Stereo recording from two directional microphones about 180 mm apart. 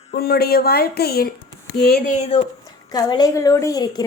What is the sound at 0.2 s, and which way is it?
Speech, 60° left (ahead or behind).